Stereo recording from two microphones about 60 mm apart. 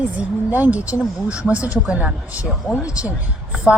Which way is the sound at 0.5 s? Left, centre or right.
Right.